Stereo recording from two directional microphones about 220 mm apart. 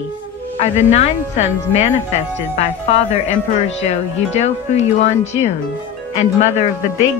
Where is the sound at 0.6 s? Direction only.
30° left (ahead or behind).